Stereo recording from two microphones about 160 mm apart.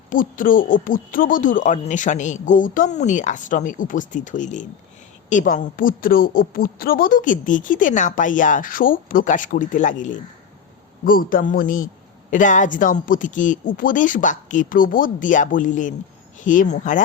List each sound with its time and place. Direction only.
0.1 s a woman's voice: 60° left (ahead or behind)